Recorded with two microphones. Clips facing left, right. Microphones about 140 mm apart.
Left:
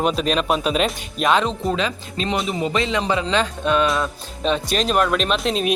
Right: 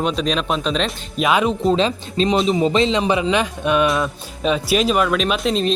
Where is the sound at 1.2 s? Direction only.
10° right (ahead or behind).